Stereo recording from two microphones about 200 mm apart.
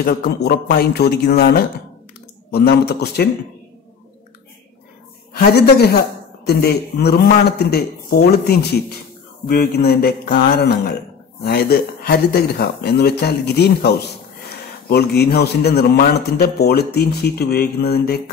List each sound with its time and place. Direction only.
0.0 s a man's voice: 50° left (ahead or behind)
5.4 s a man's voice: 55° left (ahead or behind)